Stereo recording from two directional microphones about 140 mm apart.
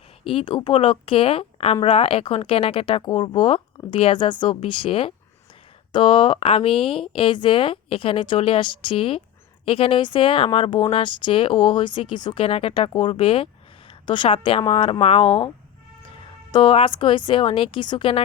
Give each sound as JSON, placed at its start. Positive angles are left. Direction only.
{"t": 0.3, "sound": "a woman's voice", "side_deg": 40}
{"t": 16.5, "sound": "a woman's voice", "side_deg": 35}